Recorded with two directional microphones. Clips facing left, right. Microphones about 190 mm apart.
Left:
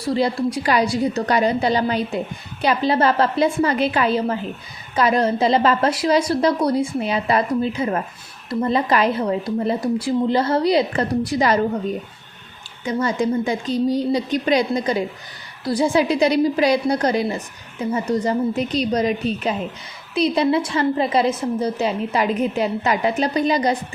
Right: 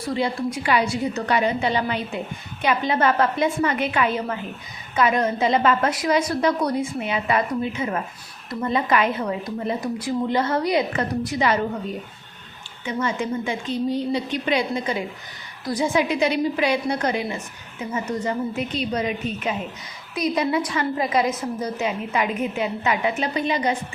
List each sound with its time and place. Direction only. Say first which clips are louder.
0.1 s a woman's voice: left 4 dB; 35° left (ahead or behind)
12.8 s a woman's voice: left 5 dB; 40° left (ahead or behind)